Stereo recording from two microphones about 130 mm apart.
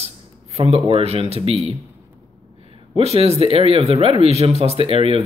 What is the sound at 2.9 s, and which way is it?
Speech, 50° right (ahead or behind).